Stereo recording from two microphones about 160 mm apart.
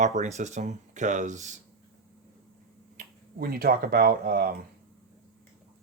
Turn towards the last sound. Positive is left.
turn(degrees=-70)  # may be behind; listen again after turning